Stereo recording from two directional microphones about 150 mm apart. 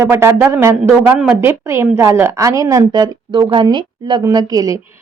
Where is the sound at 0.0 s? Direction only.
15° right (ahead or behind).